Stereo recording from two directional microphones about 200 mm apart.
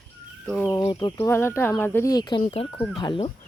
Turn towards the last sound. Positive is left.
turn(degrees=25)  # may be behind; listen again after turning